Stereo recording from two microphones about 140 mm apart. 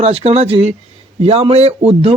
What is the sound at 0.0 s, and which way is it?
Speech, 45° right (ahead or behind).